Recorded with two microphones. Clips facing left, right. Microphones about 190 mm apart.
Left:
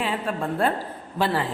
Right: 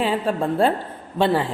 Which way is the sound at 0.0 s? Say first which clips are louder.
Right 5 dB; 30° right (ahead or behind).